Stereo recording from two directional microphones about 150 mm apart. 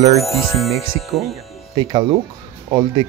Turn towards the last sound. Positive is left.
turn(degrees=-30)  # may be behind; listen again after turning